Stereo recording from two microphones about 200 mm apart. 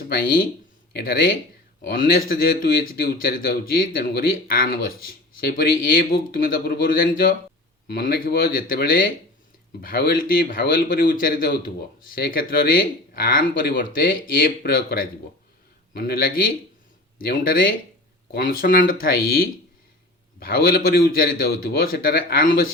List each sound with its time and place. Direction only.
0.0 s a man's voice: 45° left (ahead or behind)